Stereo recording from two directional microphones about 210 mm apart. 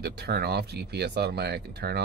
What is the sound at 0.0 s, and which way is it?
A man's voice, 50° right (ahead or behind).